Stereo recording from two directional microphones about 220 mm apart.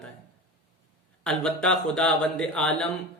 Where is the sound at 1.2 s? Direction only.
5° left (ahead or behind).